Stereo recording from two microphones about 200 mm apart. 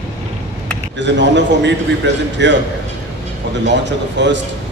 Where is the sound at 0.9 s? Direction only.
60° right (ahead or behind).